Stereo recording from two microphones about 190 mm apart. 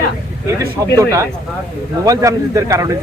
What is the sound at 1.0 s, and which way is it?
Speech, 15° right (ahead or behind).